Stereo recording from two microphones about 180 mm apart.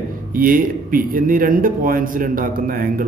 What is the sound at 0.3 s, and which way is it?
Speech, 50° right (ahead or behind).